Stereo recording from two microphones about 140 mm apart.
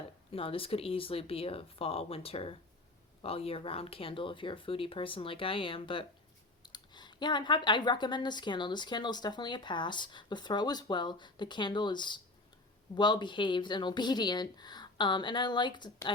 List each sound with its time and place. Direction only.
0.3 s speech: 40° left (ahead or behind)